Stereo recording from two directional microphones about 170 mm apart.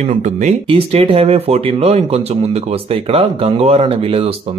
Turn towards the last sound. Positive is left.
turn(degrees=-35)  # may be behind; listen again after turning